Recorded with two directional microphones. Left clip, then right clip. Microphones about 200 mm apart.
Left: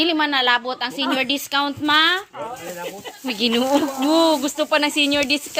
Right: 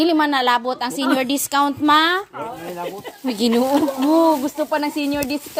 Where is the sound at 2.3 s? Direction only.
50° right (ahead or behind).